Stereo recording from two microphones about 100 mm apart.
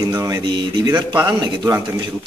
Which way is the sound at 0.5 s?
45° right (ahead or behind).